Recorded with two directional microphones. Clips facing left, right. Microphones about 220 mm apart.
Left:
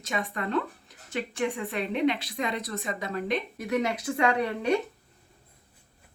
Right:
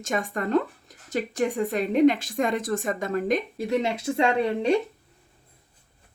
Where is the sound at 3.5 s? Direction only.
25° right (ahead or behind).